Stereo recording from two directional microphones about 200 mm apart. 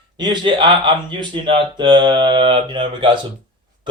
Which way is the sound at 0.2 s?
25° right (ahead or behind).